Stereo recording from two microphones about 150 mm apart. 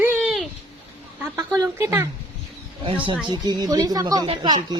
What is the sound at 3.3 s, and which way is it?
Speech, 25° right (ahead or behind).